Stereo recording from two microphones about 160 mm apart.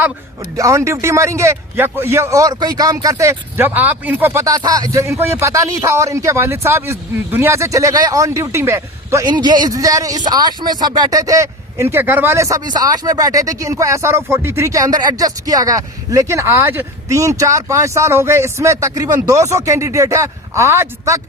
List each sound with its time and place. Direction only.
0.5 s a man's voice: 20° right (ahead or behind)